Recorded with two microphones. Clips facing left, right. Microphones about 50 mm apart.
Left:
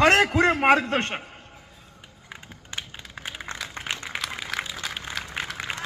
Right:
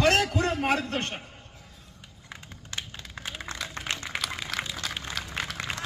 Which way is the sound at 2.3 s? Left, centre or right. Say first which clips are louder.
Left 2 dB; centre.